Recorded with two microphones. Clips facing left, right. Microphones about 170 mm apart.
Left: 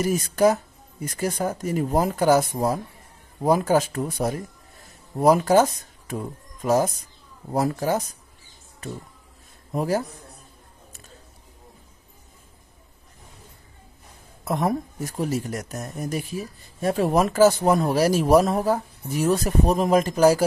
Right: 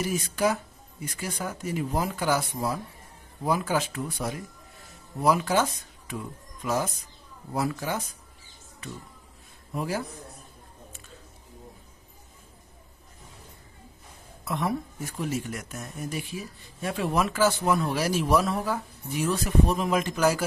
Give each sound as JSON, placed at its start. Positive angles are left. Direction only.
{"t": 0.0, "sound": "speech", "side_deg": 45}
{"t": 9.7, "sound": "a man's voice", "side_deg": 40}
{"t": 14.4, "sound": "speech", "side_deg": 45}